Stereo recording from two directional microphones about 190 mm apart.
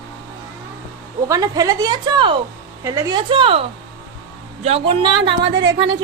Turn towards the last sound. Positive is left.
turn(degrees=-65)  # may be behind; listen again after turning